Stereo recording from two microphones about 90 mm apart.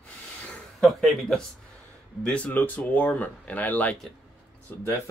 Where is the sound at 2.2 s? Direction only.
15° left (ahead or behind).